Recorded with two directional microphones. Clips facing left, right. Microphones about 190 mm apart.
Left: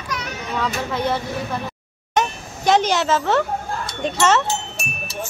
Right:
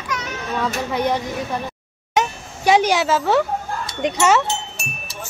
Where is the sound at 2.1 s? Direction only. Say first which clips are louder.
Even; 10° right (ahead or behind).